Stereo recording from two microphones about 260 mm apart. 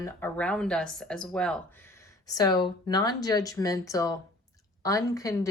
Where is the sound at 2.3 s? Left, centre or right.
Centre.